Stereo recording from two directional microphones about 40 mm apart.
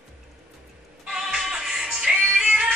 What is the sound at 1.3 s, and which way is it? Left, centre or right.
Music, centre.